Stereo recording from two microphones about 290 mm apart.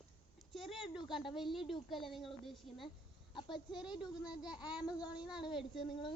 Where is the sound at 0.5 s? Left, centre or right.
Centre.